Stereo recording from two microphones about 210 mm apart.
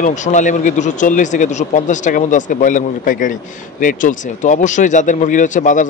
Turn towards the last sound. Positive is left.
turn(degrees=35)  # may be behind; listen again after turning